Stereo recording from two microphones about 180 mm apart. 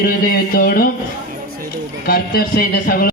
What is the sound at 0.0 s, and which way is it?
Speech, 55° left (ahead or behind).